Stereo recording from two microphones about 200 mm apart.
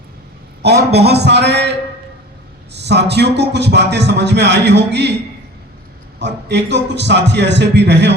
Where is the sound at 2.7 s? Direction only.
55° right (ahead or behind).